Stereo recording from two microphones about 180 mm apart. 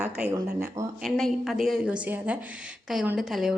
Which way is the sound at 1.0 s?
Centre (ahead or behind).